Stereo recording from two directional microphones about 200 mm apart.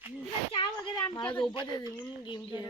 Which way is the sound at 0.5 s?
25° left (ahead or behind).